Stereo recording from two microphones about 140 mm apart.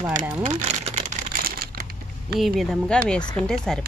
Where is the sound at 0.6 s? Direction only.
55° right (ahead or behind).